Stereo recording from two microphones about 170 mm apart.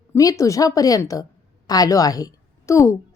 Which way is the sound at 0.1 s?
20° left (ahead or behind).